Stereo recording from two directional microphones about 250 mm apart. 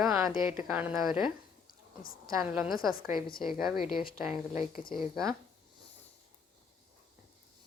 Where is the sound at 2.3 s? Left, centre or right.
Centre.